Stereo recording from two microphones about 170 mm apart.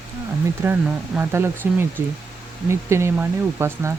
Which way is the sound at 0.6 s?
15° right (ahead or behind).